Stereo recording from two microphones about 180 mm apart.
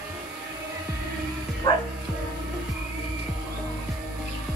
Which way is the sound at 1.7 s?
20° left (ahead or behind).